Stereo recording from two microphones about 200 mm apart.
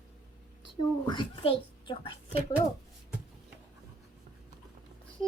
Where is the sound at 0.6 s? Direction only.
25° left (ahead or behind).